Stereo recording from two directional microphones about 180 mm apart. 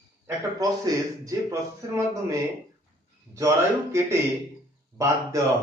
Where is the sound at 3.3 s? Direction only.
15° right (ahead or behind).